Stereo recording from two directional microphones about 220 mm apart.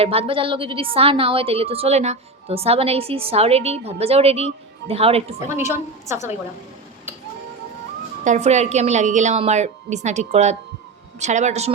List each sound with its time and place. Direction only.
0.0 s a woman's voice: 25° right (ahead or behind)
5.7 s a woman's voice: 15° right (ahead or behind)
8.2 s a woman's voice: 30° right (ahead or behind)